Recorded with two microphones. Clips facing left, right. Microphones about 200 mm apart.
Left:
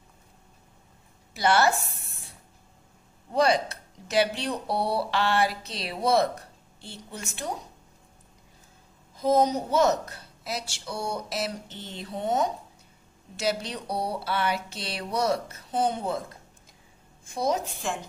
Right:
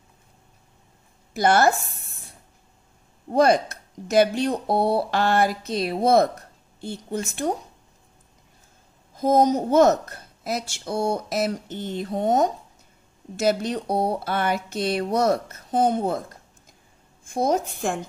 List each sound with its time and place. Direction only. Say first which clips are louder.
1.3 s speech: right 4 dB; 50° right (ahead or behind)
1.9 s a sound: even; 45° right (ahead or behind)
3.3 s speech: right 5 dB; 50° right (ahead or behind)
9.1 s speech: right 4 dB; 50° right (ahead or behind)
17.3 s speech: right 5 dB; 50° right (ahead or behind)